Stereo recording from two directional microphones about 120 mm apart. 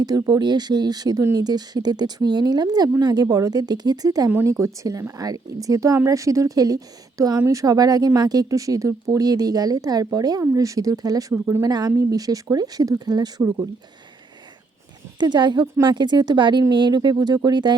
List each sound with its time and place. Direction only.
0.0 s a woman's voice: 30° right (ahead or behind)
15.2 s a woman's voice: 40° right (ahead or behind)